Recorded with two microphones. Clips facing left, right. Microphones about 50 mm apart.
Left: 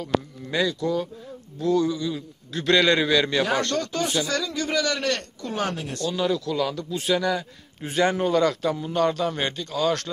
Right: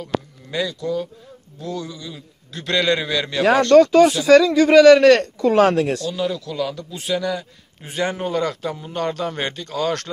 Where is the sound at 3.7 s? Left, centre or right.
Right.